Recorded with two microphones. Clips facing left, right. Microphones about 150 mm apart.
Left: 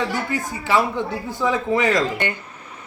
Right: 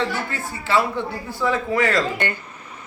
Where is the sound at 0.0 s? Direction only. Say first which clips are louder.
Left 1 dB; 15° left (ahead or behind).